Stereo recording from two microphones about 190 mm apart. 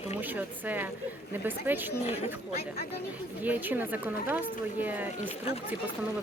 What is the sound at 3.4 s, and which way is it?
Speech, 10° right (ahead or behind).